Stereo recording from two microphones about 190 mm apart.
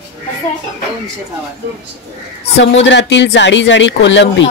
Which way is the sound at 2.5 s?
75° left (ahead or behind).